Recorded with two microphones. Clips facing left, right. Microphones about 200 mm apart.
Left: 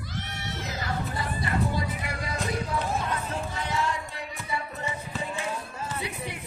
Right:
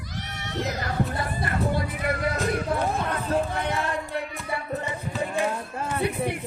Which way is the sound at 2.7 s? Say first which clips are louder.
Right 3 dB; 55° right (ahead or behind).